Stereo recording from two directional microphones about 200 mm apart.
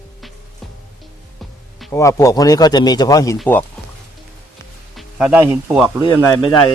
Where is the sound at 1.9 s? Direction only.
15° left (ahead or behind).